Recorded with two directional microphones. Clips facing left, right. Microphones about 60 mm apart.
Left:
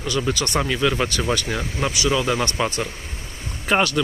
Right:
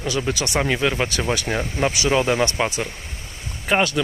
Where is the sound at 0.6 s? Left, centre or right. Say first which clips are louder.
Even; right.